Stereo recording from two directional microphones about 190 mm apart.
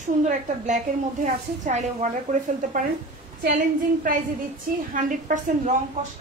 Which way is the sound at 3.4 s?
45° right (ahead or behind).